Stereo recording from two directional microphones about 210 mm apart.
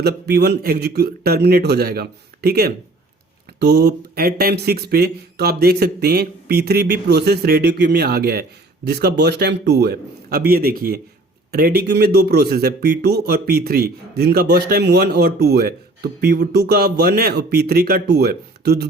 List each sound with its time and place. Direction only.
0.0 s speech: 50° right (ahead or behind)